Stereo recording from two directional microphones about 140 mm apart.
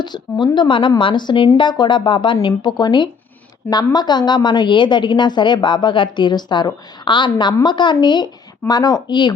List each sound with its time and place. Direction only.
0.0 s a woman's voice: 30° left (ahead or behind)